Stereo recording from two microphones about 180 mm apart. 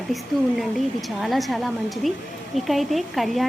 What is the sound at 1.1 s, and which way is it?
A woman's voice, centre (ahead or behind).